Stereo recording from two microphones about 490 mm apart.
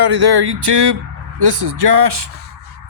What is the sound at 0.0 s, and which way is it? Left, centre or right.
Speech, right.